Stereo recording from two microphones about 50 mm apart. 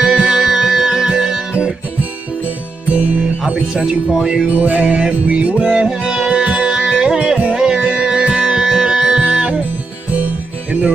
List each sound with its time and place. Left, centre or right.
0.0 s music: centre
3.4 s speech: centre
4.6 s music: right
4.8 s music: centre